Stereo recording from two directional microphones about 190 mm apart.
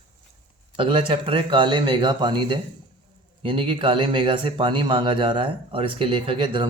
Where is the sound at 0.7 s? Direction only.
25° right (ahead or behind).